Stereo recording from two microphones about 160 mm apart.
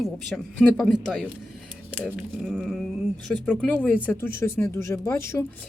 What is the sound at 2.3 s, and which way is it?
Speech, centre (ahead or behind).